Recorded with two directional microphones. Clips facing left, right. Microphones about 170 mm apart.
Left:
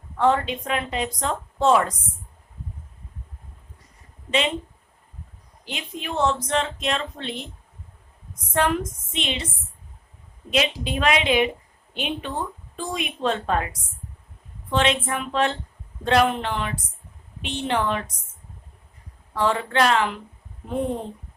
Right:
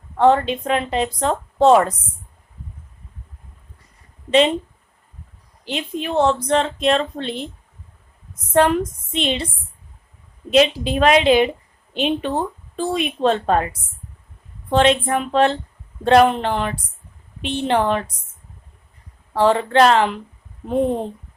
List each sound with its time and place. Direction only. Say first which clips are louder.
0.2 s speech: right 6 dB; 30° right (ahead or behind)
4.3 s a woman's voice: right 9 dB; 30° right (ahead or behind)
5.6 s speech: right 7 dB; 30° right (ahead or behind)
8.5 s speech: right 7 dB; 30° right (ahead or behind)
10.5 s speech: right 8 dB; 40° right (ahead or behind)
14.7 s speech: right 6 dB; 35° right (ahead or behind)
19.3 s speech: right 7 dB; 35° right (ahead or behind)